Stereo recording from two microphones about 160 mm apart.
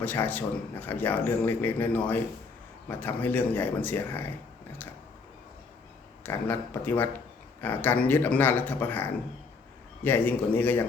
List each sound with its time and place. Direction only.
0.0 s a man's voice: 10° left (ahead or behind)
6.2 s a man's voice: 10° left (ahead or behind)